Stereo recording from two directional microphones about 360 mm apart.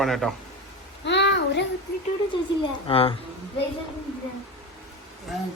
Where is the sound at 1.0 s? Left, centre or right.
Left.